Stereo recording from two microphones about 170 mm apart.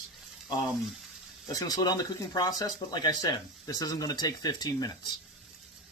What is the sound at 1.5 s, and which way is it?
Speech, 25° left (ahead or behind).